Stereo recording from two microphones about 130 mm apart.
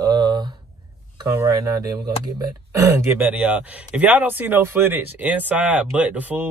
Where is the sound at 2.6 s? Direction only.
20° right (ahead or behind).